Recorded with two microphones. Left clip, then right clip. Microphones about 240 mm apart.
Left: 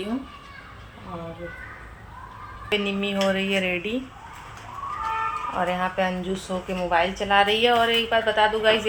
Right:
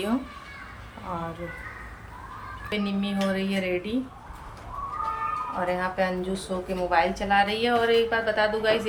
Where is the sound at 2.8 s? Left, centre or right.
Centre.